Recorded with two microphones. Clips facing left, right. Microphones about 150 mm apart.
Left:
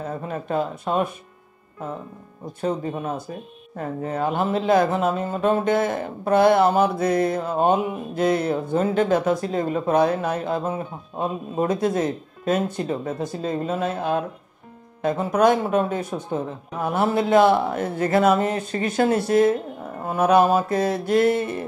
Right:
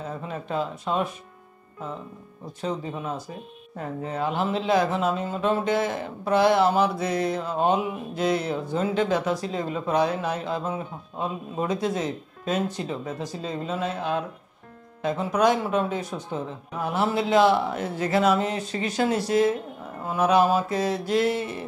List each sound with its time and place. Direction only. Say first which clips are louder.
0.0 s speech: left 4 dB; 50° left (ahead or behind)
2.6 s speech: left 5 dB; 50° left (ahead or behind)